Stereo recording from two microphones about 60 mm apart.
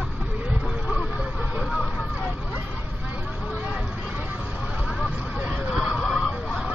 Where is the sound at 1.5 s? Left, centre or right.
Centre.